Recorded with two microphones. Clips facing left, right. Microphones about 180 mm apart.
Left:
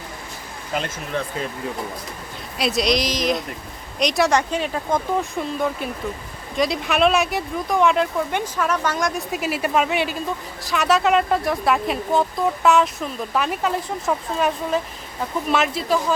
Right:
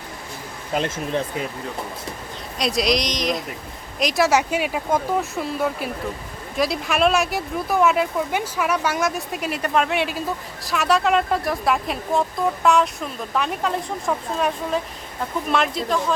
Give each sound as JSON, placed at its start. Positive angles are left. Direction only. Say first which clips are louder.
{"t": 0.7, "sound": "speech", "louder": "right 3 dB", "side_deg": -30}
{"t": 2.6, "sound": "speech", "louder": "left 1 dB", "side_deg": 0}